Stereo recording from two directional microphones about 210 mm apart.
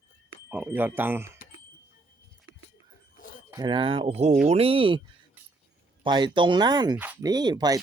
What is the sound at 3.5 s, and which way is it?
Speech, 20° right (ahead or behind).